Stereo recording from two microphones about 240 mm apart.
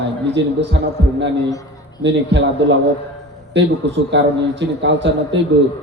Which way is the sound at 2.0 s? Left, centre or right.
Right.